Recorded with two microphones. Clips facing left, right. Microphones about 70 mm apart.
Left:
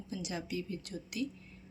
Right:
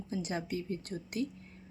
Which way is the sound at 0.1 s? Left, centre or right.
Right.